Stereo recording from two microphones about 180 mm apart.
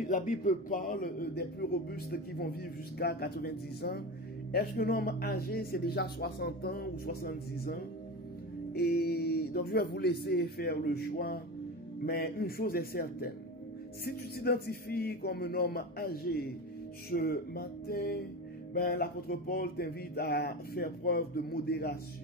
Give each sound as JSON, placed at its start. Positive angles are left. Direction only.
{"t": 0.1, "sound": "speech", "side_deg": 45}
{"t": 3.0, "sound": "speech", "side_deg": 60}